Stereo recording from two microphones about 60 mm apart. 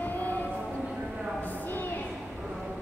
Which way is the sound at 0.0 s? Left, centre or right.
Left.